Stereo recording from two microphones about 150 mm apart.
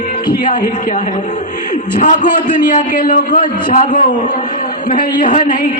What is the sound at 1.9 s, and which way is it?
A man's voice, 55° left (ahead or behind).